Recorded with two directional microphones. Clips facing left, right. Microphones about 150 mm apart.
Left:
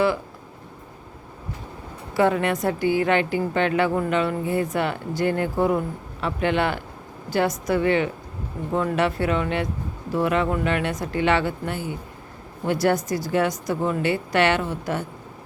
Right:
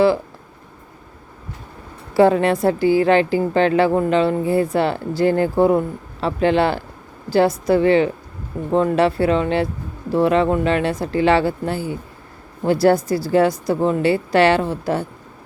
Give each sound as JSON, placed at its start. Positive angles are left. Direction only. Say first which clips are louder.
{"t": 2.1, "sound": "a woman's voice", "louder": "right 6 dB", "side_deg": -30}